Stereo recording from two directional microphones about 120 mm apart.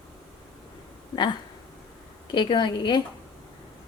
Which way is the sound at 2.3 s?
40° left (ahead or behind).